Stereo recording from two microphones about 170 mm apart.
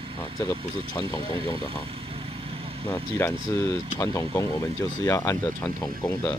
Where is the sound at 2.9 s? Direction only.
15° left (ahead or behind).